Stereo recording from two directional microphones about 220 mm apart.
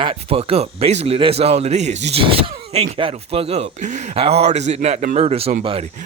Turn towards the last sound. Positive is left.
turn(degrees=-25)  # may be behind; listen again after turning